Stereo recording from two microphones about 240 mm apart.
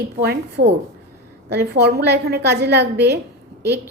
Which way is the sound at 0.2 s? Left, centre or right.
Right.